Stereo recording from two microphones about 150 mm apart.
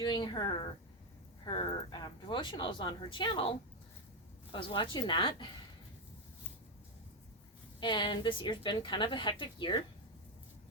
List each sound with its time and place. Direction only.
0.0 s a woman's voice: 30° left (ahead or behind)
4.5 s a woman's voice: 30° left (ahead or behind)
7.8 s a woman's voice: 30° left (ahead or behind)